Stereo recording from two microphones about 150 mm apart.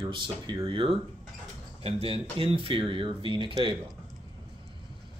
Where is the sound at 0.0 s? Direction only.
30° right (ahead or behind).